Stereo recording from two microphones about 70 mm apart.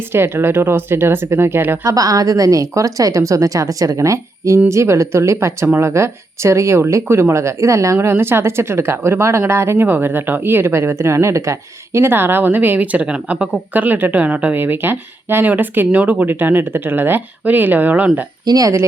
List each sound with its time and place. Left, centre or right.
0.1 s speech: right
1.8 s a woman's voice: right
7.9 s speech: right
14.6 s speech: right
18.4 s speech: right